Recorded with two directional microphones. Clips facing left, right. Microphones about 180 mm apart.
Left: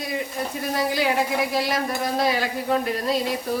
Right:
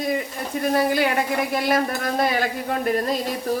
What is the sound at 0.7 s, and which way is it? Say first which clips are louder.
Speech: right 2 dB; 55° right (ahead or behind).